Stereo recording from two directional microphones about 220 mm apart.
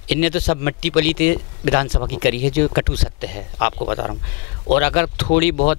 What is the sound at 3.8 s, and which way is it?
Speech, 25° left (ahead or behind).